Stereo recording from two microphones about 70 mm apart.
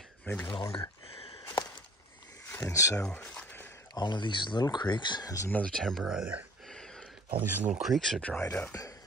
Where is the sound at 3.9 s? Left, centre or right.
Left.